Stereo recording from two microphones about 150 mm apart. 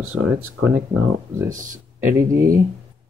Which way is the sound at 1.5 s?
60° right (ahead or behind).